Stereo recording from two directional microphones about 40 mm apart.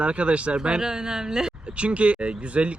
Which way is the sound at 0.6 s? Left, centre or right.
Centre.